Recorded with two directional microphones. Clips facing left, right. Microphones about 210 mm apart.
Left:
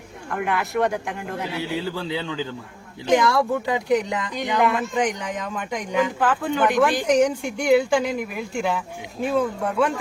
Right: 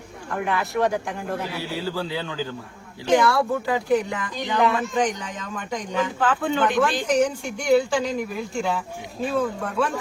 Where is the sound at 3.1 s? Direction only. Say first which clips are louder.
Even; 20° left (ahead or behind).